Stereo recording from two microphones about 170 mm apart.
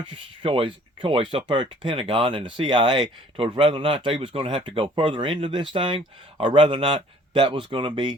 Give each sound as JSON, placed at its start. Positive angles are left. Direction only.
{"t": 0.1, "sound": "speech", "side_deg": -30}